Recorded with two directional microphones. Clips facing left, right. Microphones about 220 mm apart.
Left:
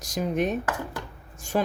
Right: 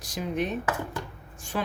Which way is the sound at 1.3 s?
45° left (ahead or behind).